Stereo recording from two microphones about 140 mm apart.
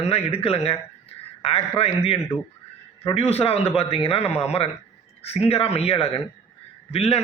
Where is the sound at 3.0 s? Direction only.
40° left (ahead or behind).